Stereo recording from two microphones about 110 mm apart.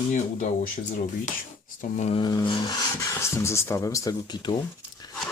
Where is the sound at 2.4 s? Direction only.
40° left (ahead or behind).